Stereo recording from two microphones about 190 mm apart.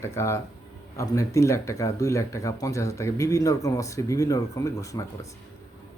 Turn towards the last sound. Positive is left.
turn(degrees=15)  # may be behind; listen again after turning